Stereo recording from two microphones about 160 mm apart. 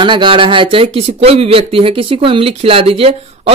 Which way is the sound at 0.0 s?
30° right (ahead or behind).